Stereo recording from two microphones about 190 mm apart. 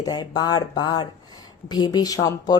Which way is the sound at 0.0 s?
20° left (ahead or behind).